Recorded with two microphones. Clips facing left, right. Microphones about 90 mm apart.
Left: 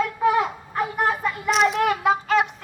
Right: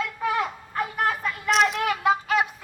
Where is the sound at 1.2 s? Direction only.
Centre (ahead or behind).